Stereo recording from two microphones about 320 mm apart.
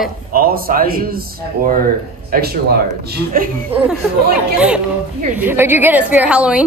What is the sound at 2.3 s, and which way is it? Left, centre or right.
Speech, right.